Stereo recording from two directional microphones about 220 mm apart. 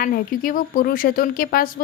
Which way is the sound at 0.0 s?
40° left (ahead or behind).